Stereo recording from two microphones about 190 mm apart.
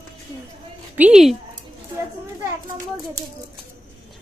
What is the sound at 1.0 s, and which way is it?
Speech, 5° right (ahead or behind).